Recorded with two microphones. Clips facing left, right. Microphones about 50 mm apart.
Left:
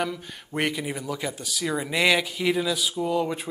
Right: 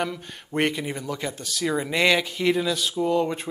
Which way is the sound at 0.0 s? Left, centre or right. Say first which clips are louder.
Even; centre.